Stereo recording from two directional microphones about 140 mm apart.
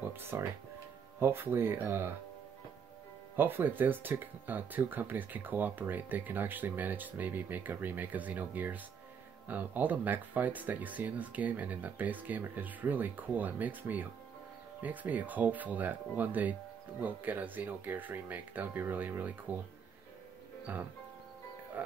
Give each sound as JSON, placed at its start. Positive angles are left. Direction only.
{"t": 0.1, "sound": "speech", "side_deg": -15}
{"t": 3.3, "sound": "speech", "side_deg": -15}
{"t": 20.7, "sound": "speech", "side_deg": -10}